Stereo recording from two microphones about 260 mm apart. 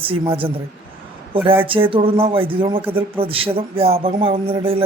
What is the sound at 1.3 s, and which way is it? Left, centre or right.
Speech, right.